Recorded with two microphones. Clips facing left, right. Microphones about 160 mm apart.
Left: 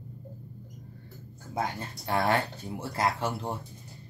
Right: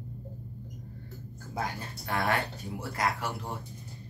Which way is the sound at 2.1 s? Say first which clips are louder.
Left 3 dB; 25° left (ahead or behind).